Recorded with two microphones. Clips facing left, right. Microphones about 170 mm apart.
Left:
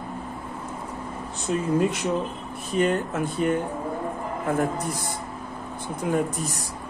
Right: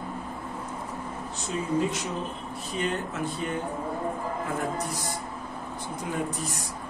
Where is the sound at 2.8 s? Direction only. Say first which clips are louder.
Left 7 dB; 50° left (ahead or behind).